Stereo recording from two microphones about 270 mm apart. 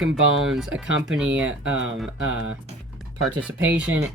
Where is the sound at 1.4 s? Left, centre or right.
Right.